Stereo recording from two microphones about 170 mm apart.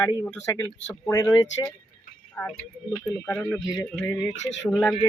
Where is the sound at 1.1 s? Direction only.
20° left (ahead or behind).